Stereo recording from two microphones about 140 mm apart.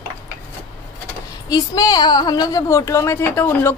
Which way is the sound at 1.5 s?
30° left (ahead or behind).